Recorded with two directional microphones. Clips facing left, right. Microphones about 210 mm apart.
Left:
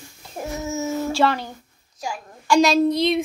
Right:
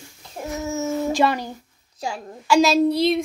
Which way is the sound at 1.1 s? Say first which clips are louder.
Even; 15° right (ahead or behind).